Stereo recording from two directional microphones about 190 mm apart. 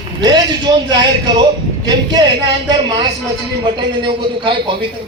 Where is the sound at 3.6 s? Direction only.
25° right (ahead or behind).